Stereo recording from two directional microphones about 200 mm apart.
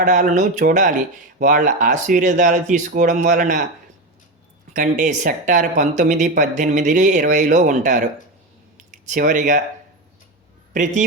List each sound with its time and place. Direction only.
0.0 s speech: 40° right (ahead or behind)
4.7 s speech: 40° right (ahead or behind)
8.8 s a sound: 40° right (ahead or behind)
10.7 s speech: 40° right (ahead or behind)